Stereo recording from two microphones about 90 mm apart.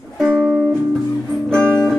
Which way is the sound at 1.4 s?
10° left (ahead or behind).